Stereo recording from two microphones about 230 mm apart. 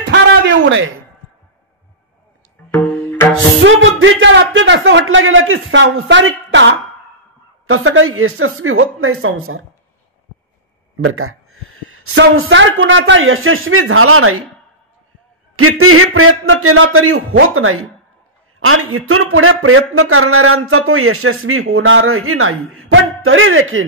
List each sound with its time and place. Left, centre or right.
0.1 s a sound: right
2.7 s music: centre
3.6 s speech: right
11.0 s speech: right
15.5 s a man's voice: right